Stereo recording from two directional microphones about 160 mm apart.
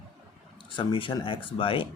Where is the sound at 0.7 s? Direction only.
30° left (ahead or behind).